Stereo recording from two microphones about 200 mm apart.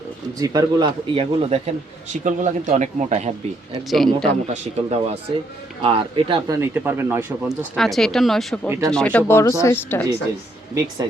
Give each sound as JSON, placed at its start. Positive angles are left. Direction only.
{"t": 0.3, "sound": "speech", "side_deg": -20}
{"t": 3.8, "sound": "speech", "side_deg": 0}
{"t": 4.4, "sound": "speech", "side_deg": -30}
{"t": 6.6, "sound": "speech", "side_deg": -10}
{"t": 7.8, "sound": "speech", "side_deg": 0}